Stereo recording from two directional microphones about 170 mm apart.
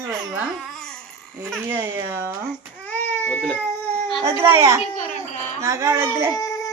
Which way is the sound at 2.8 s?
10° left (ahead or behind).